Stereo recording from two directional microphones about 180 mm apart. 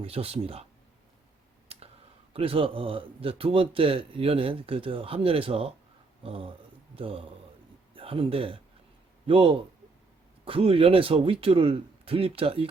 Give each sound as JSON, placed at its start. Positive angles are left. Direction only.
{"t": 0.0, "sound": "a man's voice", "side_deg": -35}
{"t": 1.7, "sound": "a sound", "side_deg": -35}
{"t": 2.3, "sound": "a man's voice", "side_deg": -30}